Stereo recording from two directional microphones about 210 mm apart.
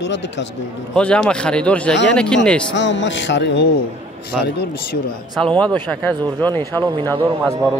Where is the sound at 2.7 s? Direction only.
60° left (ahead or behind).